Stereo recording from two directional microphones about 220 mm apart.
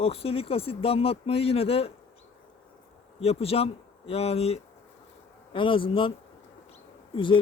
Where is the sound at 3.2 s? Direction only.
25° left (ahead or behind).